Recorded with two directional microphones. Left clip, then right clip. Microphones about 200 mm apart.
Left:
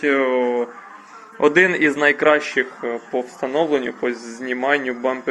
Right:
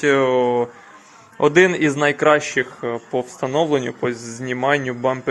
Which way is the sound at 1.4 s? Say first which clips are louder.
Even; 15° right (ahead or behind).